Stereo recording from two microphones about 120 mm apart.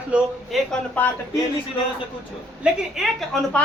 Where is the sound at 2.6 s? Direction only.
10° right (ahead or behind).